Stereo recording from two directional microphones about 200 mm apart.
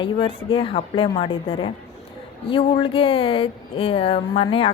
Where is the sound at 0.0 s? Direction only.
25° left (ahead or behind).